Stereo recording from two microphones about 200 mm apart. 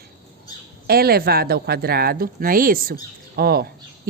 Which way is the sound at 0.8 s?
50° right (ahead or behind).